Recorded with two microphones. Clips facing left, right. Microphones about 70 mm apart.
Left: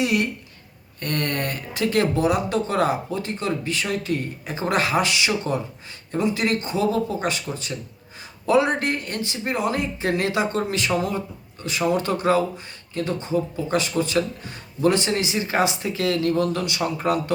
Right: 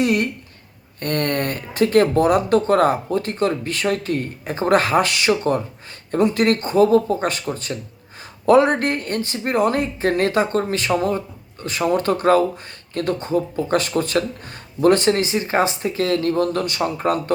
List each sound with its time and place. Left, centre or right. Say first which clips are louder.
0.0 s speech: right 3 dB; right